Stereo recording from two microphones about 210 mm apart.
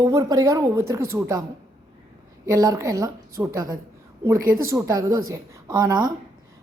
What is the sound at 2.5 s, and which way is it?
A woman's voice, 15° right (ahead or behind).